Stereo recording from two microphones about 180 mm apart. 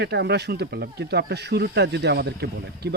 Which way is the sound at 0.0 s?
65° right (ahead or behind).